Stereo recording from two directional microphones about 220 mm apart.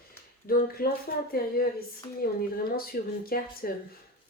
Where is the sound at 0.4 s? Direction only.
45° left (ahead or behind).